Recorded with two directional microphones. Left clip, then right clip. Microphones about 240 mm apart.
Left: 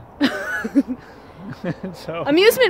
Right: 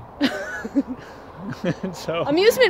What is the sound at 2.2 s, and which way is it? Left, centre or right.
Speech, left.